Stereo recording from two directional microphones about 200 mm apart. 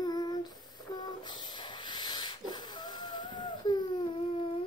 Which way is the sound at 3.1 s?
20° left (ahead or behind).